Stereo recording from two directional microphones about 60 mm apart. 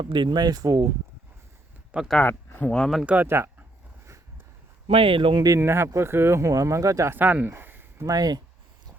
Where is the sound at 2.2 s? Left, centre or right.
Left.